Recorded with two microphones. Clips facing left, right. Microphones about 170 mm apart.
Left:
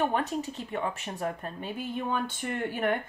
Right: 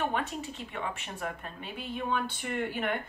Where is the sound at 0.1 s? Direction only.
40° left (ahead or behind).